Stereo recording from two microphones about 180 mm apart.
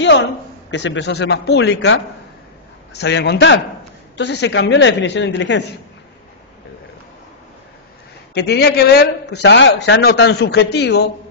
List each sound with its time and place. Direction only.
0.0 s a man's voice: 80° left
8.4 s a man's voice: 65° left (ahead or behind)